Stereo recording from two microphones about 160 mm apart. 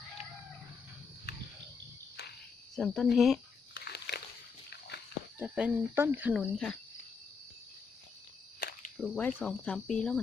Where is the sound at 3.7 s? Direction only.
90° left.